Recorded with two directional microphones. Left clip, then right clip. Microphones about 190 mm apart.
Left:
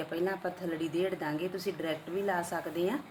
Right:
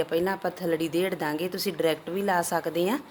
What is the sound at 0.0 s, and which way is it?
A woman's voice, 45° right (ahead or behind).